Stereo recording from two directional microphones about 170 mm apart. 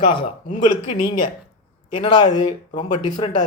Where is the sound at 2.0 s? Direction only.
25° left (ahead or behind).